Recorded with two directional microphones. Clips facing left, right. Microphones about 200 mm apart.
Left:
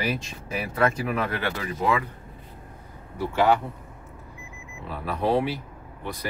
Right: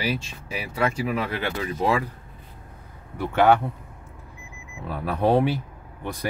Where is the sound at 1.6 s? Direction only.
30° right (ahead or behind).